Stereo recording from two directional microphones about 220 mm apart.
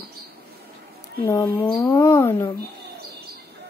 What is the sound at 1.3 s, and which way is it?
Speech, 15° left (ahead or behind).